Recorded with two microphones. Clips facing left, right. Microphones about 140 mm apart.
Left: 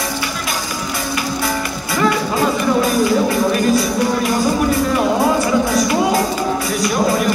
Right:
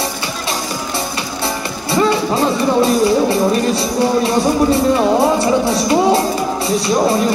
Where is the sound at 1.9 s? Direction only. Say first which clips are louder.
Right 3 dB; 30° right (ahead or behind).